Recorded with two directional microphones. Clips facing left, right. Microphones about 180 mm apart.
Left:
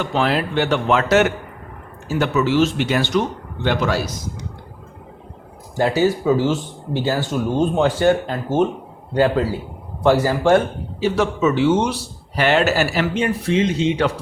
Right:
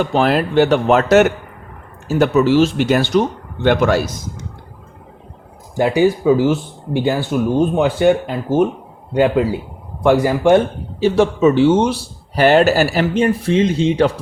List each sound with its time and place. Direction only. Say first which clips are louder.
0.0 s speech: right 4 dB; 40° right (ahead or behind)
2.0 s speech: right 5 dB; 40° right (ahead or behind)
3.6 s a man's voice: right 6 dB; 50° right (ahead or behind)
5.7 s speech: right 3 dB; 15° right (ahead or behind)
11.0 s speech: right 5 dB; 30° right (ahead or behind)
12.4 s speech: right 5 dB; 40° right (ahead or behind)